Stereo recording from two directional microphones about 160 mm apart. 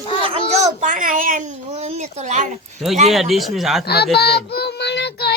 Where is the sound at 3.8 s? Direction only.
90° left.